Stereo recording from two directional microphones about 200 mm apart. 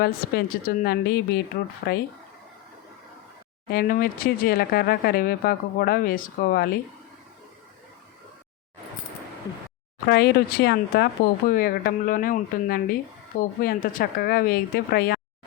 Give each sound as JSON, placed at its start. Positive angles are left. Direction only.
{"t": 0.0, "sound": "speech", "side_deg": 50}
{"t": 3.7, "sound": "speech", "side_deg": 45}
{"t": 10.1, "sound": "speech", "side_deg": 55}